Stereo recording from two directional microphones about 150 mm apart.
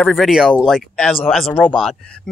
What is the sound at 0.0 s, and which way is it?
Speech, 5° left (ahead or behind).